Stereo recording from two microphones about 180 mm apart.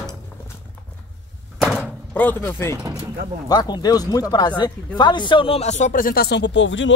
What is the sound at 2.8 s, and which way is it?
Vehicle, 20° right (ahead or behind).